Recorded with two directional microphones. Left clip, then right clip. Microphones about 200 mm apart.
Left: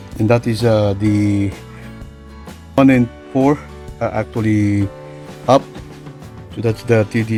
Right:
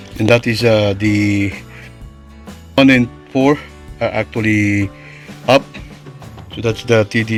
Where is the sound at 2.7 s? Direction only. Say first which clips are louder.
Right 2 dB; 5° left (ahead or behind).